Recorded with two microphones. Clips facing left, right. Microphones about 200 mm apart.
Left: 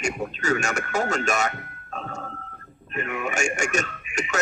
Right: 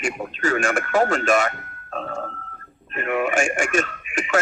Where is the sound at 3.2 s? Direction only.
45° left (ahead or behind).